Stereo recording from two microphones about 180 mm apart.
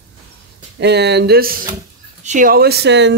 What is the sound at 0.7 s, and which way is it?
Speech, 70° right (ahead or behind).